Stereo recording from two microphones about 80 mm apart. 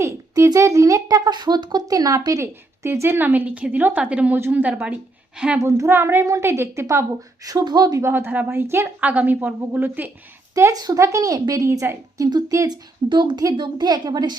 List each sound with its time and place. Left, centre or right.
0.0 s a woman's voice: right; by 4.9 s centre
5.5 s speech: right
6.2 s speech: right
7.4 s a woman's voice: right
7.9 s speech: right
9.0 s a woman's voice: centre
10.5 s a woman's voice: right
12.7 s a woman's voice: right
13.6 s a woman's voice: right